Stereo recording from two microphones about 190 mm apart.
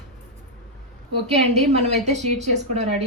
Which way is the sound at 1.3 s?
35° right (ahead or behind).